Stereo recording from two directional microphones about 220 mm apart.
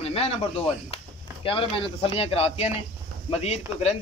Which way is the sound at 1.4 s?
25° left (ahead or behind).